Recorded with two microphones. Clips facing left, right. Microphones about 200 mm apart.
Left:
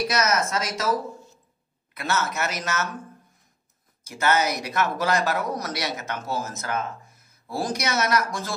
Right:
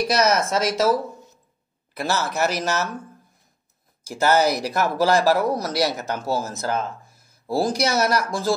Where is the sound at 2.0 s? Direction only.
35° right (ahead or behind).